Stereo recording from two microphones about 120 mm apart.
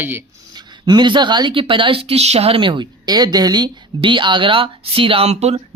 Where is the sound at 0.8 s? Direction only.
40° right (ahead or behind); by 5.6 s 65° right (ahead or behind).